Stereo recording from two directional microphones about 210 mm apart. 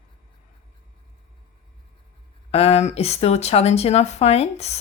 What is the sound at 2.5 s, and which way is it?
Speech, 30° left (ahead or behind).